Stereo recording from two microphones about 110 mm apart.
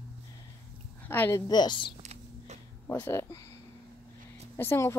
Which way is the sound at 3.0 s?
20° left (ahead or behind).